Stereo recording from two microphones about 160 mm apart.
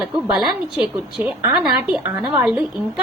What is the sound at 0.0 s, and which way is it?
A woman's voice, centre (ahead or behind).